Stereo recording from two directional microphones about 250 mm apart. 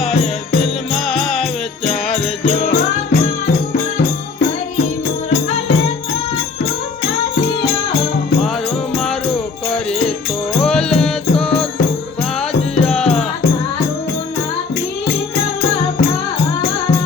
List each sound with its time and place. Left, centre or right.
0.6 s music: centre
2.1 s music: left
9.0 s music: centre
10.6 s music: centre
12.7 s music: centre